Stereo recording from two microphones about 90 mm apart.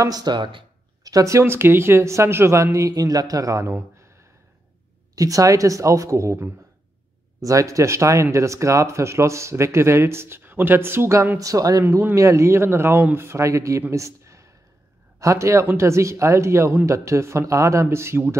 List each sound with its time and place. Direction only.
0.0 s speech: 45° right (ahead or behind); by 0.7 s 65° right (ahead or behind)
1.0 s speech: 40° right (ahead or behind)
3.9 s a sound: 30° right (ahead or behind)
5.1 s speech: 40° right (ahead or behind)
11.3 s speech: 40° right (ahead or behind)